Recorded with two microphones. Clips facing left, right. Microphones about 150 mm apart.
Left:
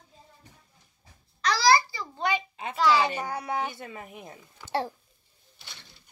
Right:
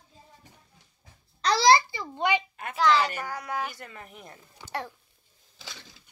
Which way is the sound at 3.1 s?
25° left (ahead or behind).